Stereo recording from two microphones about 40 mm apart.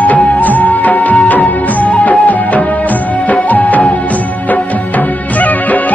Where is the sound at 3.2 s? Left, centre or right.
Left.